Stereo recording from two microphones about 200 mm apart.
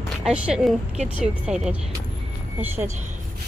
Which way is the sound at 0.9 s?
35° right (ahead or behind).